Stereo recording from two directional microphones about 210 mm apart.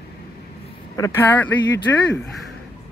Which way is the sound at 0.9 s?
10° left (ahead or behind).